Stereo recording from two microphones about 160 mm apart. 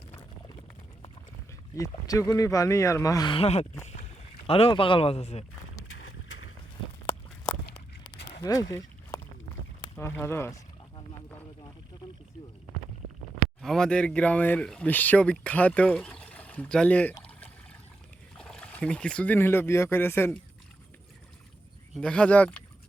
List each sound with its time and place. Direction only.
1.7 s speech: 20° left (ahead or behind)
3.3 s a man's voice: 40° left (ahead or behind)
8.4 s a sound: 25° left (ahead or behind)
9.8 s speech: 15° left (ahead or behind)
13.6 s speech: 5° left (ahead or behind)
18.3 s speech: 5° left (ahead or behind)
21.9 s speech: 5° left (ahead or behind)